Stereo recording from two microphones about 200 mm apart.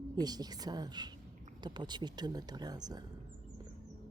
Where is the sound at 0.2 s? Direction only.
20° right (ahead or behind).